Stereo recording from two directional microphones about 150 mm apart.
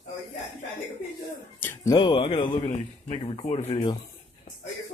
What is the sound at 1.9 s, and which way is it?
Speech, 35° left (ahead or behind).